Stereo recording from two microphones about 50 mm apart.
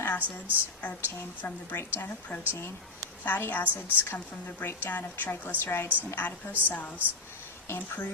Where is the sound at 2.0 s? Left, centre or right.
Left.